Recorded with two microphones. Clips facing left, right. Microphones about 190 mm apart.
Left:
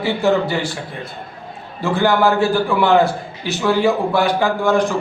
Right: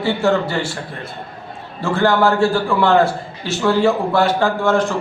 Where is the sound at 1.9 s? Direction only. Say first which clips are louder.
Even; 15° left (ahead or behind).